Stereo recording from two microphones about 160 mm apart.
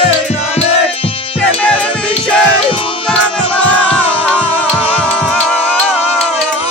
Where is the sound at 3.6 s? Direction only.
5° left (ahead or behind).